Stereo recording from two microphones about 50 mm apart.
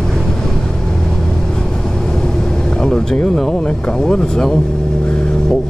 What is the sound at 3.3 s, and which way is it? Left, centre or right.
Speech, centre.